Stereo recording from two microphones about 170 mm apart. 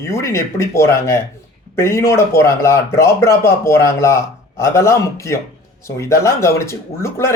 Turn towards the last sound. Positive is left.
turn(degrees=15)  # may be behind; listen again after turning